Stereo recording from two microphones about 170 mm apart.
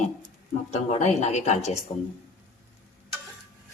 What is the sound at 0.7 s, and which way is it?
Speech, 45° left (ahead or behind).